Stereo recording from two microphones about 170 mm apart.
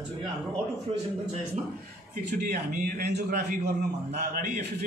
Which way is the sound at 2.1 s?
55° right (ahead or behind).